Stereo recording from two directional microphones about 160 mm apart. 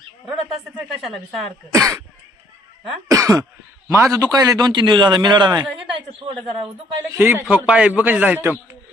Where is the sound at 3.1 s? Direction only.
20° right (ahead or behind).